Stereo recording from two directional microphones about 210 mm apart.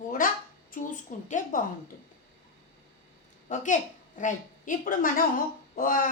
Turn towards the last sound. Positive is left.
turn(degrees=40)  # may be behind; listen again after turning